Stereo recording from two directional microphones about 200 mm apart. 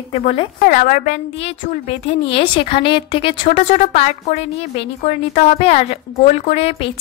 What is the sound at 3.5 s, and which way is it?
A woman's voice, 40° left (ahead or behind).